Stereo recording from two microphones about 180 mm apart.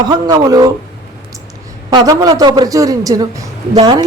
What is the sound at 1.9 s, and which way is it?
Speech, 25° right (ahead or behind).